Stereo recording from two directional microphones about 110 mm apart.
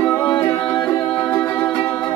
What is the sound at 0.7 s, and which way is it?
Music, 40° left (ahead or behind).